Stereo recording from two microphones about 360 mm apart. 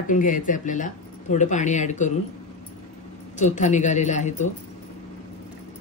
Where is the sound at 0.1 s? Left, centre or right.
Left.